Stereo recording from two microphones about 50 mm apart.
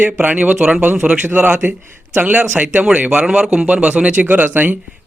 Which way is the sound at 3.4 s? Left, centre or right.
Right.